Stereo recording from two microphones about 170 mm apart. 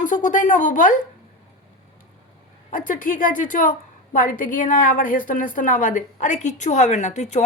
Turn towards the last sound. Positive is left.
turn(degrees=45)  # may be behind; listen again after turning